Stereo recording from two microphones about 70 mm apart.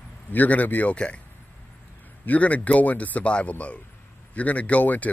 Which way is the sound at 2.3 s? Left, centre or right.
Left.